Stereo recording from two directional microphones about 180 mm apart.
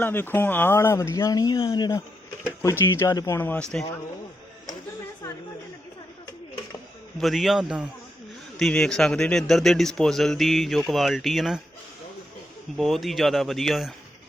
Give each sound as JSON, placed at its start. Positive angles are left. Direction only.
{"t": 0.0, "sound": "speech", "side_deg": 10}
{"t": 7.2, "sound": "a man's voice", "side_deg": 0}
{"t": 12.7, "sound": "a man's voice", "side_deg": 0}